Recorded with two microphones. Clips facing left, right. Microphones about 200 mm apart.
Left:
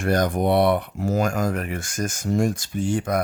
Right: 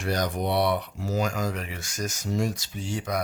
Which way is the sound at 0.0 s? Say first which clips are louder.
Left 6 dB; 50° left (ahead or behind).